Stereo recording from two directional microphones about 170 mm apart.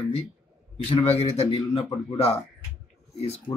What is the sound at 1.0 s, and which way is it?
Speech, 35° left (ahead or behind).